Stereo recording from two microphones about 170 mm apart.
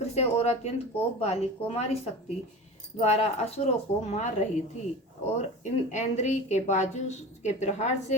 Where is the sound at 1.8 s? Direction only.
40° left (ahead or behind).